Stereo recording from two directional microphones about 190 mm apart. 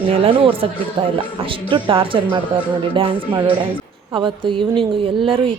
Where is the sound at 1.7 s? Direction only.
30° right (ahead or behind).